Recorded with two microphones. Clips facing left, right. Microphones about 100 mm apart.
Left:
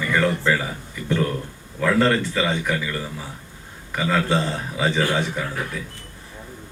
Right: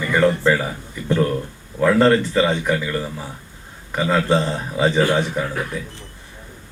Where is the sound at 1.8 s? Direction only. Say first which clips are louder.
Right 4 dB; 30° right (ahead or behind).